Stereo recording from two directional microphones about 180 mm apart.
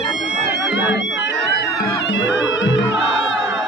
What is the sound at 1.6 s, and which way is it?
Music, 65° left (ahead or behind).